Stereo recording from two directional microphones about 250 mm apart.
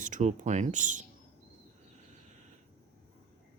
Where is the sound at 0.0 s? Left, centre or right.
Right.